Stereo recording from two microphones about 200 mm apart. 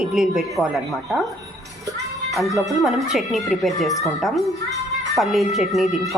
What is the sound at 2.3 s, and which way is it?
A woman's voice, centre (ahead or behind).